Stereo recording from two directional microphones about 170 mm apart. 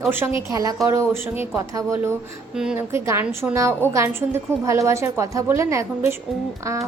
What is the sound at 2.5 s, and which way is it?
A woman's voice, 5° right (ahead or behind).